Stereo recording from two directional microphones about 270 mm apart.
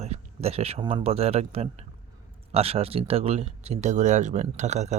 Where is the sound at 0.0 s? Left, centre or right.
Right.